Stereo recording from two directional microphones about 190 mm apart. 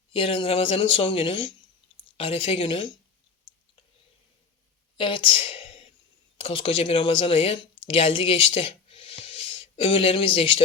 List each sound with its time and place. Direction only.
0.1 s speech: 25° left (ahead or behind)
4.9 s a sound: 25° left (ahead or behind)
6.3 s speech: 30° left (ahead or behind)